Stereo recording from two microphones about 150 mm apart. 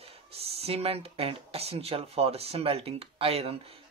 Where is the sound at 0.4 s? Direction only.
40° right (ahead or behind).